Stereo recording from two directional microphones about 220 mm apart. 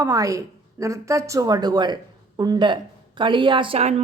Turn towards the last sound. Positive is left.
turn(degrees=-25)  # may be behind; listen again after turning